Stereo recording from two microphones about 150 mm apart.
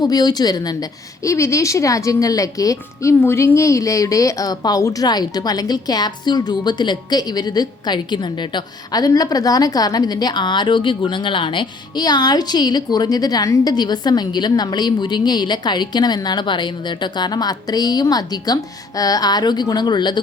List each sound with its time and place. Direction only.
0.0 s a woman's voice: 25° left (ahead or behind)